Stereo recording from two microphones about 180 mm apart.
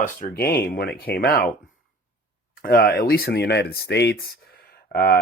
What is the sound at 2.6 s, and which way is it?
Speech, 55° left (ahead or behind).